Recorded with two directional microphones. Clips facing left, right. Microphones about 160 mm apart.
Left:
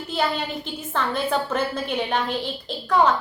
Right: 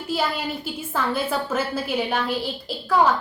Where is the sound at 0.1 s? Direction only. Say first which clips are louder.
Even; 5° right (ahead or behind).